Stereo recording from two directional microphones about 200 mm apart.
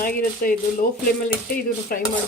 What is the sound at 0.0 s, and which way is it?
Speech, 45° left (ahead or behind).